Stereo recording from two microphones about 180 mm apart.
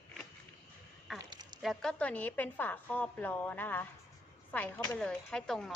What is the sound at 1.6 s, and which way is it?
A woman's voice, centre (ahead or behind).